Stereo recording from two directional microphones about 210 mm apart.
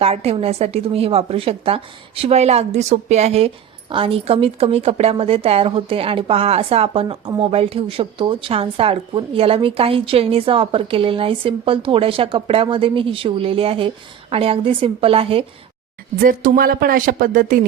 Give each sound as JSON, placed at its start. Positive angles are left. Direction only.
{"t": 0.0, "sound": "speech", "side_deg": -30}
{"t": 16.2, "sound": "speech", "side_deg": -40}